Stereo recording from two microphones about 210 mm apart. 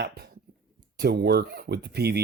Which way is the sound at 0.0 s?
50° right (ahead or behind).